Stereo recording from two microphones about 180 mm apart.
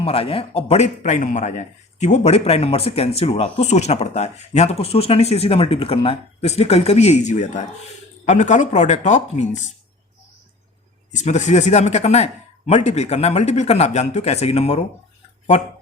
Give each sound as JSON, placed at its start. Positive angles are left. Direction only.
{"t": 0.0, "sound": "a man's voice", "side_deg": 30}
{"t": 11.1, "sound": "a man's voice", "side_deg": 40}